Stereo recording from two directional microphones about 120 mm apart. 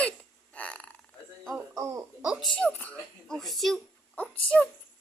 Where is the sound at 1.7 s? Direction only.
25° right (ahead or behind).